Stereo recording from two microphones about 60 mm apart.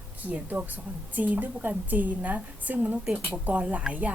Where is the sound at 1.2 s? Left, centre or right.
Right.